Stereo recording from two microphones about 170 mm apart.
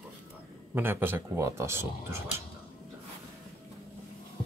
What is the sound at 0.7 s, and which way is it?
Speech, 10° right (ahead or behind).